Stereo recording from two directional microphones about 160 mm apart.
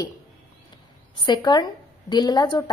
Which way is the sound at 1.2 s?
30° left (ahead or behind).